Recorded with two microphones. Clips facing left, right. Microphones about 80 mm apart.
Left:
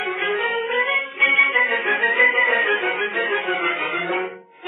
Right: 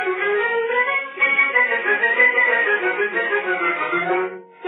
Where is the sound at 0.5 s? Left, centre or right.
Centre.